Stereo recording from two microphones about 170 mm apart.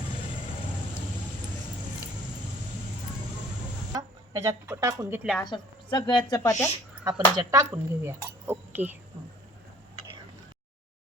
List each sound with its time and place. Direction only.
3.9 s speech: 20° right (ahead or behind)
5.4 s a woman's voice: 25° left (ahead or behind)
7.0 s speech: 25° right (ahead or behind)